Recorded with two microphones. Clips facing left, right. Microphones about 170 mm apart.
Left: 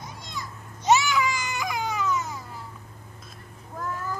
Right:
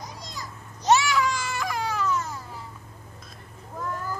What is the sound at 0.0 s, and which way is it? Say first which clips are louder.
Children playing: left 1 dB; 40° right (ahead or behind).